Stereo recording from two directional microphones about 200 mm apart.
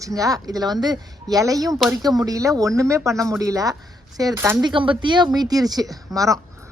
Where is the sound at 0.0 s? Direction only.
15° right (ahead or behind).